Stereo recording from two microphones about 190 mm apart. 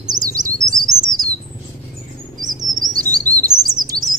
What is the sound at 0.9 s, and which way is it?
Bird, 20° right (ahead or behind).